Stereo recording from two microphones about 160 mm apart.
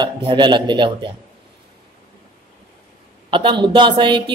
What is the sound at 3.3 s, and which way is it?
Speech, 30° right (ahead or behind).